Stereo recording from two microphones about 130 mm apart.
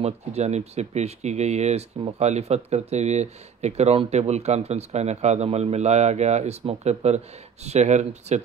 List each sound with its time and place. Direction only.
0.0 s speech: 55° right (ahead or behind)